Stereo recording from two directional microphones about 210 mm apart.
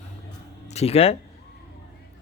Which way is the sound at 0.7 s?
30° left (ahead or behind).